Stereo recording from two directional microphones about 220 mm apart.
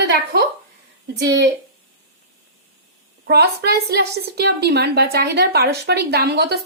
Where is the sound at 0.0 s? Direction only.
50° right (ahead or behind).